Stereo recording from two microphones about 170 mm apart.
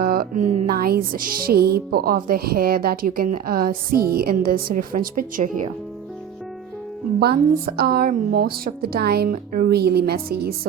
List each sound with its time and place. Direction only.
0.0 s music: 60° right (ahead or behind)
0.7 s a woman's voice: 60° right (ahead or behind)
7.2 s a woman's voice: 65° right (ahead or behind)